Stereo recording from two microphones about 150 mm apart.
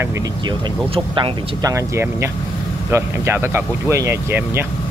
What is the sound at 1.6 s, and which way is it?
Speech, 20° right (ahead or behind).